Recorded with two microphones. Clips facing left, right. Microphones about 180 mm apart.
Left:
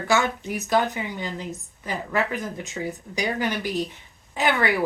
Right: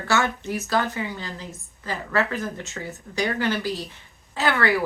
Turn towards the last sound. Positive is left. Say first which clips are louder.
# even
turn(degrees=15)  # may be behind; listen again after turning